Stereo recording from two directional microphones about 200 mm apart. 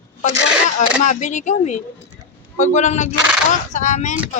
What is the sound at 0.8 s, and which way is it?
A woman's voice, 40° left (ahead or behind).